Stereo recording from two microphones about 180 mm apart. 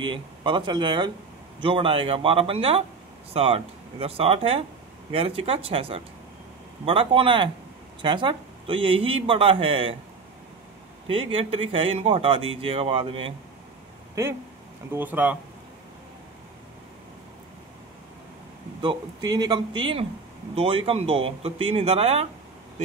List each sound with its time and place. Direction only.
0.0 s speech: 25° right (ahead or behind)
11.1 s speech: 30° right (ahead or behind)
14.2 s speech: 15° right (ahead or behind)
18.8 s speech: 25° right (ahead or behind)